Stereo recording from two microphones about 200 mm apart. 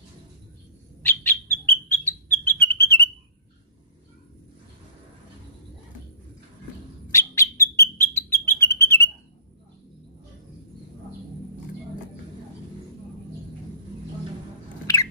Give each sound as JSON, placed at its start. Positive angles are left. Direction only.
{"t": 1.0, "sound": "bird", "side_deg": 10}
{"t": 7.1, "sound": "bird", "side_deg": 15}